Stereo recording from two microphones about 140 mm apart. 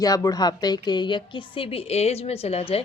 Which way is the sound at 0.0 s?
25° left (ahead or behind).